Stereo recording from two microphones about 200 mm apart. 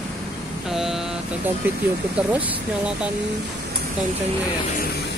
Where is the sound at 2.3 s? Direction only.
10° right (ahead or behind).